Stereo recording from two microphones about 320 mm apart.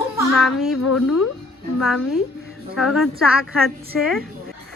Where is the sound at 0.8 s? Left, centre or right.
Left.